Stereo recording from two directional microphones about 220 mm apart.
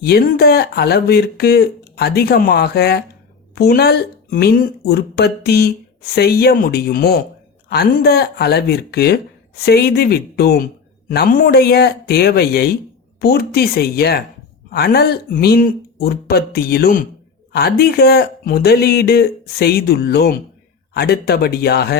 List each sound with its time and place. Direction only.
0.0 s speech: 45° left (ahead or behind)